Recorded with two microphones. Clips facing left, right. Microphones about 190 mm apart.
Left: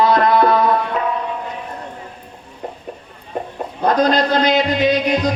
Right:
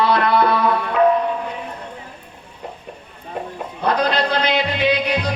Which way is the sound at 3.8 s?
45° left (ahead or behind).